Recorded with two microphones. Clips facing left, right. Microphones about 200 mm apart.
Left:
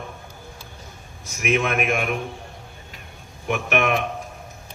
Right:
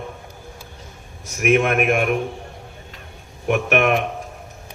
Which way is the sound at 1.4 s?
55° right (ahead or behind).